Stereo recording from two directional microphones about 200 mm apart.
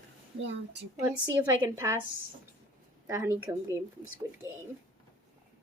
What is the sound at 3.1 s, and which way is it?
Speech, 10° right (ahead or behind).